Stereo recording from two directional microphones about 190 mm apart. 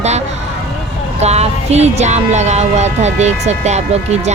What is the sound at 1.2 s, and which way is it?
A woman's voice, 35° right (ahead or behind).